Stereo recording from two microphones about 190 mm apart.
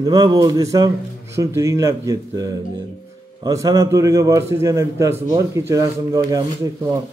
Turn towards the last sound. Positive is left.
turn(degrees=-20)  # may be behind; listen again after turning